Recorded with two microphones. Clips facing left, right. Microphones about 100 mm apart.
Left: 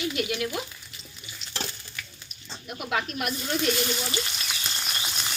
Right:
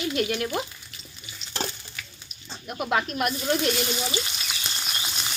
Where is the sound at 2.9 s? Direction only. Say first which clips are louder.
Right 4 dB; 45° right (ahead or behind).